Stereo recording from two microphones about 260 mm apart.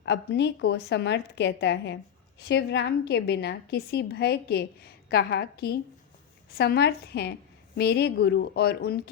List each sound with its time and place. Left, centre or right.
0.0 s a woman's voice: left